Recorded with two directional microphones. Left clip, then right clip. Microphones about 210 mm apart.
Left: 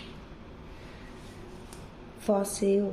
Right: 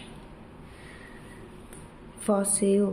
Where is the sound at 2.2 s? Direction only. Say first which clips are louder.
Right 1 dB; 15° right (ahead or behind).